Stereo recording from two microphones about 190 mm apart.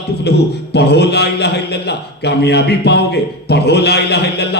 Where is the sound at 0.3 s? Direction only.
60° left (ahead or behind).